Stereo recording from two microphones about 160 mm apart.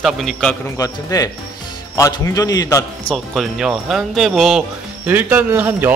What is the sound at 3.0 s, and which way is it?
A man's voice, centre (ahead or behind).